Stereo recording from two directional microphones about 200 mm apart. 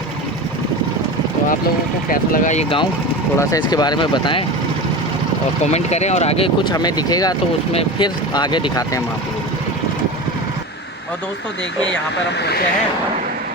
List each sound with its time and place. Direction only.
2.0 s speech: 40° left (ahead or behind)
3.3 s speech: 15° left (ahead or behind)
5.7 s speech: 35° left (ahead or behind)
12.4 s speech: 55° left (ahead or behind)